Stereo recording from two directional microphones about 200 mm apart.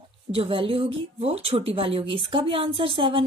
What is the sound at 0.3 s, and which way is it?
A woman's voice, 25° right (ahead or behind).